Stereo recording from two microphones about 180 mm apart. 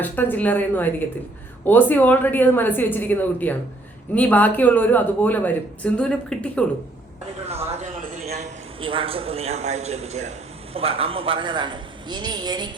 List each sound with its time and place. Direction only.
0.0 s speech: 10° left (ahead or behind)
7.4 s a man's voice: 35° right (ahead or behind)